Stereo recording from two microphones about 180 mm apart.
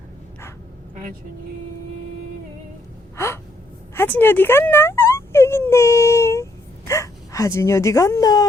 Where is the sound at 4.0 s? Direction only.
10° left (ahead or behind).